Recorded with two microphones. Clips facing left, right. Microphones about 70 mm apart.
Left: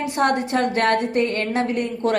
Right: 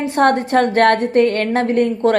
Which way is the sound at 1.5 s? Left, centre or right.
Right.